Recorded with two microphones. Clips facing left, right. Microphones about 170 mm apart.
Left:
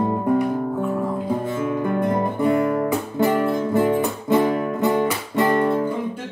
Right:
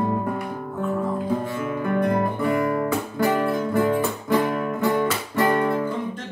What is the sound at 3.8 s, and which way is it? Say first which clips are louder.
Guitar: left 2 dB; 20° left (ahead or behind).